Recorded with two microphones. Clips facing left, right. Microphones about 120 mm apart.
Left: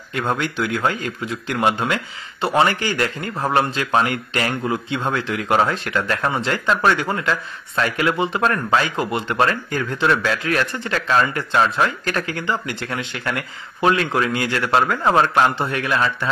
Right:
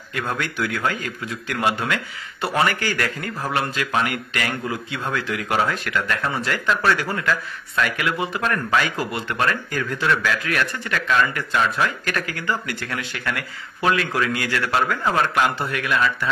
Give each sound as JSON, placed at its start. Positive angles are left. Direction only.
{"t": 0.1, "sound": "a man's voice", "side_deg": 25}